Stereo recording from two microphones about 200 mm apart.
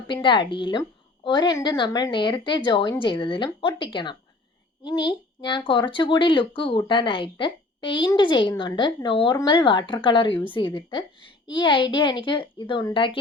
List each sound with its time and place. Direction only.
0.1 s speech: 25° left (ahead or behind)
11.5 s speech: 25° left (ahead or behind)